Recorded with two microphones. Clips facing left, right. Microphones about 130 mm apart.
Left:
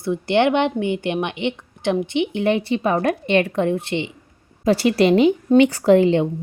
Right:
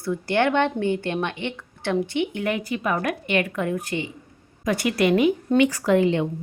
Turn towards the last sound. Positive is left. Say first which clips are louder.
# left 5 dB
turn(degrees=30)  # may be behind; listen again after turning